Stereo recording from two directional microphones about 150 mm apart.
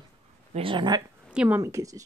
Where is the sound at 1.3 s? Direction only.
10° right (ahead or behind).